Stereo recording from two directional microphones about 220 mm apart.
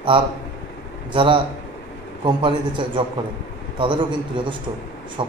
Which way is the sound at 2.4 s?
20° right (ahead or behind).